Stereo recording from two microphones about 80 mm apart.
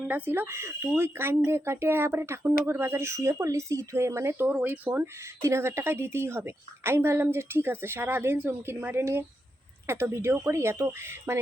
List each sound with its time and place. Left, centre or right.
0.3 s a woman's voice: right